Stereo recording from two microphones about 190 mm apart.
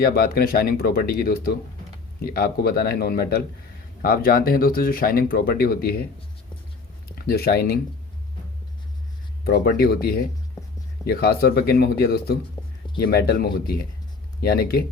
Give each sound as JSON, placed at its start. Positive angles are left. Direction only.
{"t": 0.0, "sound": "speech", "side_deg": 50}
{"t": 7.2, "sound": "speech", "side_deg": 55}
{"t": 9.4, "sound": "speech", "side_deg": 55}